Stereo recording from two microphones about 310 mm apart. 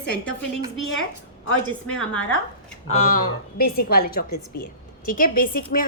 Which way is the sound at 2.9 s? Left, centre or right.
Left.